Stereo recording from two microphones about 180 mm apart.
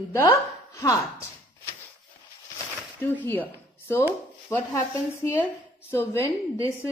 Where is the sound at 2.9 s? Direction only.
10° left (ahead or behind).